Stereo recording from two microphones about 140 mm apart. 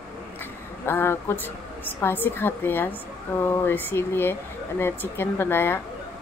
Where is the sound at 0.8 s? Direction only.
15° left (ahead or behind).